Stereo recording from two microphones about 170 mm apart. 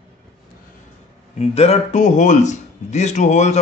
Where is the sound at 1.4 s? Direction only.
40° left (ahead or behind).